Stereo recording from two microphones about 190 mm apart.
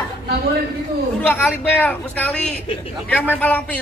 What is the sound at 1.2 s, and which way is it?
Speech, 10° left (ahead or behind).